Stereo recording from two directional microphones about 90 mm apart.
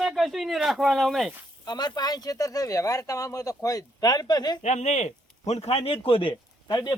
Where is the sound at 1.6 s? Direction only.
50° left (ahead or behind).